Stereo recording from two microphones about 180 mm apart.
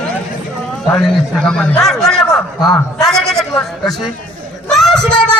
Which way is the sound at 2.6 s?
20° left (ahead or behind).